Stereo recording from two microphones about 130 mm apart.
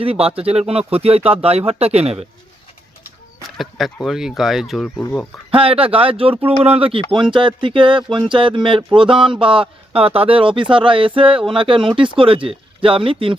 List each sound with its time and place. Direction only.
0.0 s speech: 50° right (ahead or behind)
3.6 s speech: centre (ahead or behind)
5.5 s speech: 45° right (ahead or behind)